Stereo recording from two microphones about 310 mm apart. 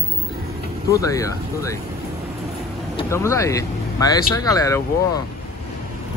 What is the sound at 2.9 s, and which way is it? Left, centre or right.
Speech, centre.